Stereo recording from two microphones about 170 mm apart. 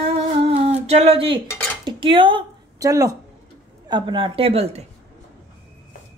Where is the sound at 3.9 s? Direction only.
25° right (ahead or behind).